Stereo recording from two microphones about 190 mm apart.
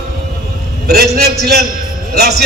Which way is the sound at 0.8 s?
55° right (ahead or behind).